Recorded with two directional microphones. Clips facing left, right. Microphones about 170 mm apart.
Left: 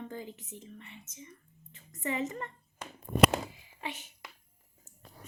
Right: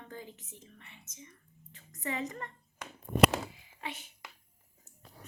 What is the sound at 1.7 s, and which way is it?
Speech, 25° left (ahead or behind).